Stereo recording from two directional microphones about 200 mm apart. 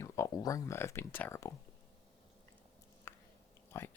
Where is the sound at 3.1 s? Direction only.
10° left (ahead or behind).